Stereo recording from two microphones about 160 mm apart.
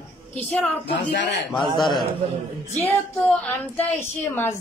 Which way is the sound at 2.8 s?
10° left (ahead or behind).